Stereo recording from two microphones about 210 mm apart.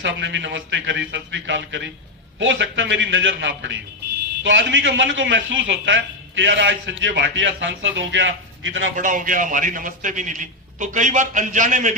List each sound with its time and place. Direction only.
0.0 s a man's voice: 60° right (ahead or behind)
9.0 s a man's voice: 40° right (ahead or behind)